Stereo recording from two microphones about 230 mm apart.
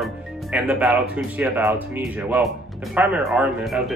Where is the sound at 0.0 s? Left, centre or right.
Centre.